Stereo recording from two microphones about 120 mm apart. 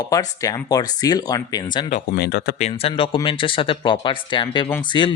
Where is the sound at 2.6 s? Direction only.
60° left (ahead or behind).